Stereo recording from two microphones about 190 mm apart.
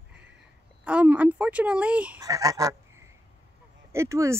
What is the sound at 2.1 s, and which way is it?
Speech, 20° right (ahead or behind).